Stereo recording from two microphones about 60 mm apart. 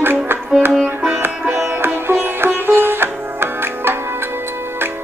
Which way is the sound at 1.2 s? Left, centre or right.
Right.